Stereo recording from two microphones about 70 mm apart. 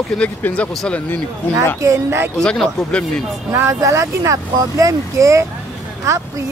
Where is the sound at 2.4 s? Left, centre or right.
Centre.